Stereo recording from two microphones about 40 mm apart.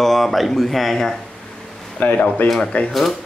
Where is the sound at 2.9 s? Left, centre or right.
Centre.